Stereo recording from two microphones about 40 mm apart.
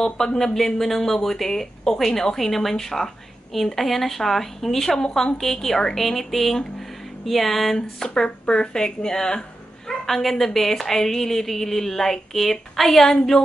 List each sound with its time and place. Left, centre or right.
0.0 s speech: centre
7.7 s speech: centre
9.8 s speech: centre